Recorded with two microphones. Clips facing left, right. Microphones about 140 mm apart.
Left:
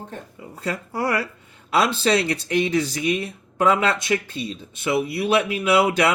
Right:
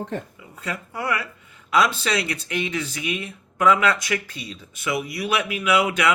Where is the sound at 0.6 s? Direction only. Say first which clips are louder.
Left 4 dB; 35° left (ahead or behind).